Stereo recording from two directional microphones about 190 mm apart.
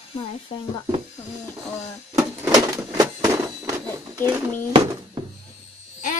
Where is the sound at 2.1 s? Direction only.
15° right (ahead or behind).